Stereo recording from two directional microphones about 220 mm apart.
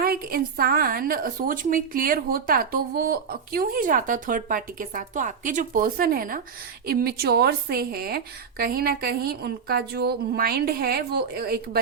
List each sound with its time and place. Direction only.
0.0 s a woman's voice: 45° right (ahead or behind)